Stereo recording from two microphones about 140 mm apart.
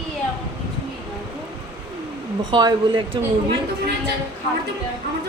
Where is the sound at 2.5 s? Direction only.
30° right (ahead or behind).